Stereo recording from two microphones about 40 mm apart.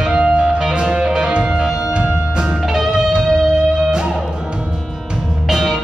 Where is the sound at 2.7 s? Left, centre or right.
Centre.